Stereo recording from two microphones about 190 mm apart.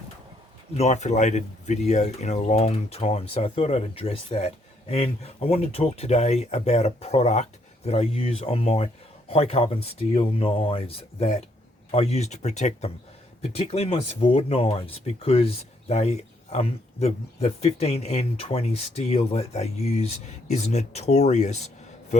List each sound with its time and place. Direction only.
0.7 s speech: 35° left (ahead or behind)